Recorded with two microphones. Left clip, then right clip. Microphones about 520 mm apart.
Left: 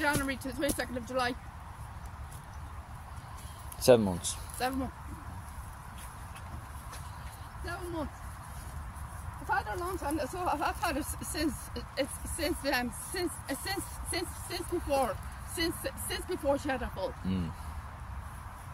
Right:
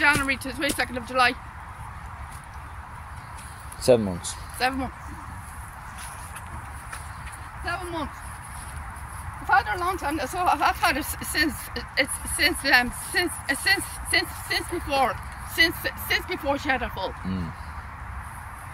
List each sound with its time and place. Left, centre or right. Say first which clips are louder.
0.0 s speech: right 10 dB; left
3.8 s speech: right 3 dB; left
9.5 s speech: right 11 dB; left